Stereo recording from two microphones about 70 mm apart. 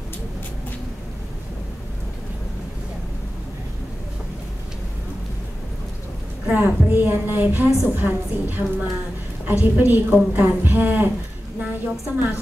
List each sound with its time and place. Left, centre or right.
6.4 s a woman's voice: right